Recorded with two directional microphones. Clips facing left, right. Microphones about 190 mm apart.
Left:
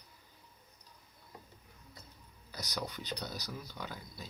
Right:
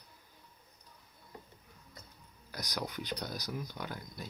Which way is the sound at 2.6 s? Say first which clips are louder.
Right 1 dB; 15° right (ahead or behind).